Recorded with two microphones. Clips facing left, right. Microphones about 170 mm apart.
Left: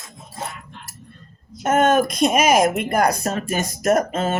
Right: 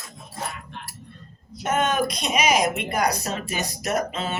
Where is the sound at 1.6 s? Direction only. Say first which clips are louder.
Left 6 dB; 50° left (ahead or behind).